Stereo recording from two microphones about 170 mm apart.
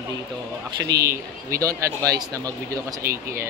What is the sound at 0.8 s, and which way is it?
Speech, 20° right (ahead or behind).